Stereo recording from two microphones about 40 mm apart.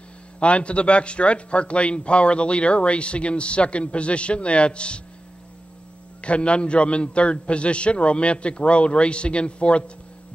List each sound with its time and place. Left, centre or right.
0.4 s speech: left
6.2 s speech: left